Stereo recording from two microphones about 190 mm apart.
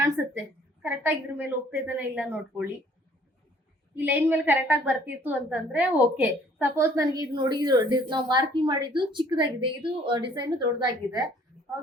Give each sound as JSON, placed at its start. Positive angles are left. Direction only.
{"t": 0.2, "sound": "a sound", "side_deg": -10}
{"t": 0.8, "sound": "a woman's voice", "side_deg": -10}
{"t": 3.9, "sound": "a woman's voice", "side_deg": -10}